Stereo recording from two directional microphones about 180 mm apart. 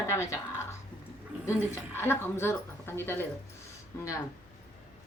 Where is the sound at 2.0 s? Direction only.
15° left (ahead or behind).